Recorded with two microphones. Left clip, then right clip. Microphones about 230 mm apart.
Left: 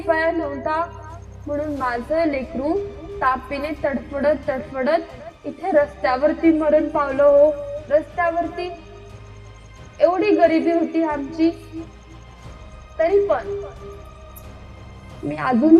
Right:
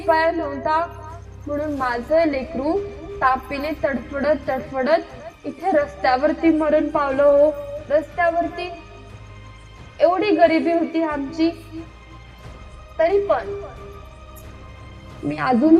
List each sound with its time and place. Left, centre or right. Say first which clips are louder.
0.0 s a woman's voice: right 2 dB; right
10.0 s a woman's voice: even; right
13.0 s a woman's voice: even; right
15.3 s a woman's voice: left 1 dB; right